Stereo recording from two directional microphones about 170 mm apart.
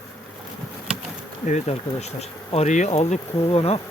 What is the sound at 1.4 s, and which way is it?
Speech, 40° left (ahead or behind).